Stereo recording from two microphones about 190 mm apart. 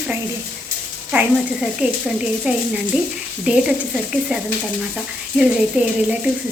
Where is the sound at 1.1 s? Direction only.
5° right (ahead or behind).